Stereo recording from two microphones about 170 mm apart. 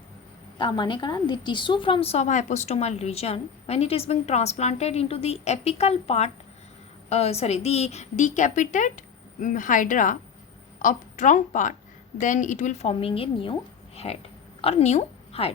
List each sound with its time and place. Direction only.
0.6 s a woman's voice: 30° left (ahead or behind)